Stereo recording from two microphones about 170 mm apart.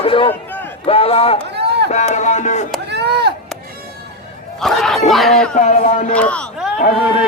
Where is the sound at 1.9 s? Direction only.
45° left (ahead or behind).